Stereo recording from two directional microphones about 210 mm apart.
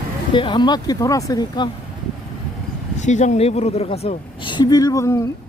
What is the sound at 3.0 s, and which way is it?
A woman's voice, 35° left (ahead or behind).